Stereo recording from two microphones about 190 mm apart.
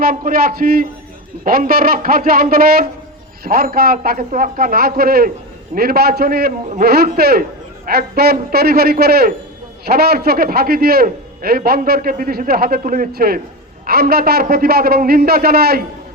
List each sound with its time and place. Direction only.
0.0 s a man's voice: 45° right (ahead or behind)